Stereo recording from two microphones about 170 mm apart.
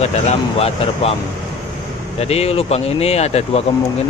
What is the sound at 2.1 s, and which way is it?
Speech, 40° left (ahead or behind).